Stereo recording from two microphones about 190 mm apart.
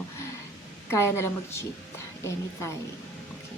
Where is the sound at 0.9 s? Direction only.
15° left (ahead or behind).